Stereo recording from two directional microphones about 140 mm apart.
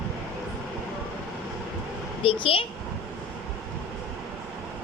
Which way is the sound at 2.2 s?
40° left (ahead or behind).